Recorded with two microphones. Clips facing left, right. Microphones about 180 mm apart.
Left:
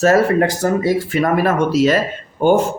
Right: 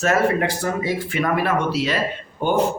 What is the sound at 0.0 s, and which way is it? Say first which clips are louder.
Speech: left 6 dB; 40° left (ahead or behind).